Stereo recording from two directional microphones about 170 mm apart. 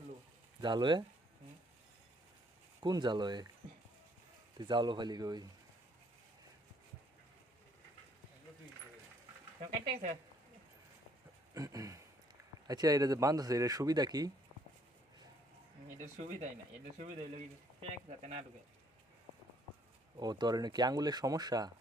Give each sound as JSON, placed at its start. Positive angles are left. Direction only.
{"t": 0.6, "sound": "speech", "side_deg": -25}
{"t": 2.8, "sound": "speech", "side_deg": -25}
{"t": 4.5, "sound": "speech", "side_deg": -25}
{"t": 9.6, "sound": "speech", "side_deg": -40}
{"t": 11.5, "sound": "a sound", "side_deg": -20}
{"t": 12.6, "sound": "speech", "side_deg": -20}
{"t": 16.0, "sound": "speech", "side_deg": -45}
{"t": 20.1, "sound": "speech", "side_deg": -25}